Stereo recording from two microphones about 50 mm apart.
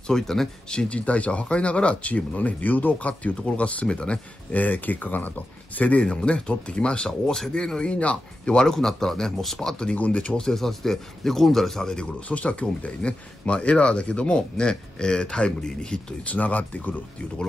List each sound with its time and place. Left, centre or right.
0.0 s speech: centre
0.7 s speech: left
4.6 s speech: left
7.1 s speech: centre; by 8.6 s left
8.6 s speech: centre
9.8 s speech: left
10.3 s speech: centre
12.3 s speech: left
16.3 s speech: left